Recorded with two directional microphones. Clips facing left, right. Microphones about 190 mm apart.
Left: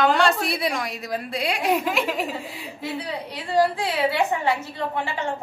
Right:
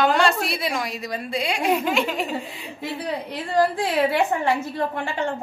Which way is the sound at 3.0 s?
50° right (ahead or behind).